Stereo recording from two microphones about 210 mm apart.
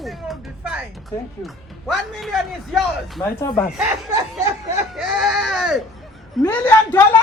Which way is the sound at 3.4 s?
15° left (ahead or behind).